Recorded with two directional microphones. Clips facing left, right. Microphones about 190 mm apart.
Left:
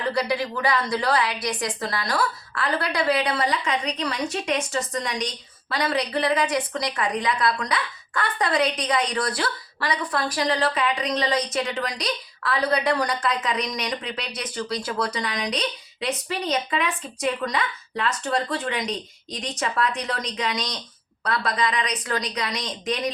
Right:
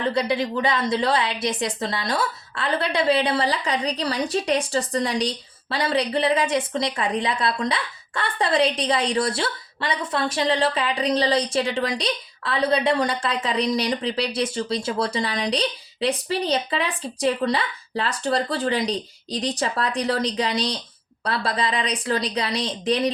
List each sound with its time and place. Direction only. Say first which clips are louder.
0.0 s a woman's voice: right 2 dB; 25° right (ahead or behind)